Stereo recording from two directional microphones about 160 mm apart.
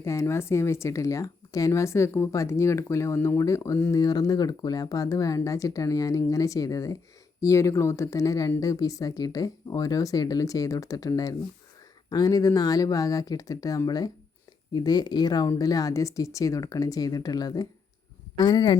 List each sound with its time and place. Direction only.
0.0 s speech: 15° left (ahead or behind)